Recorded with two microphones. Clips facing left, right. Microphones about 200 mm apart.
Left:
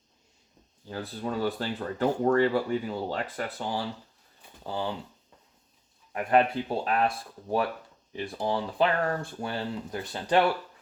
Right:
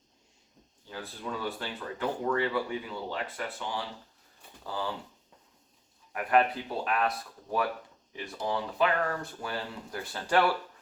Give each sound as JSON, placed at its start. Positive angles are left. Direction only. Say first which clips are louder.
{"t": 0.9, "sound": "speech", "louder": "left 5 dB", "side_deg": 40}
{"t": 4.6, "sound": "speech", "louder": "left 3 dB", "side_deg": 25}
{"t": 6.1, "sound": "speech", "louder": "left 2 dB", "side_deg": 30}
{"t": 8.1, "sound": "speech", "louder": "left 3 dB", "side_deg": 30}
{"t": 9.9, "sound": "speech", "louder": "left 2 dB", "side_deg": 20}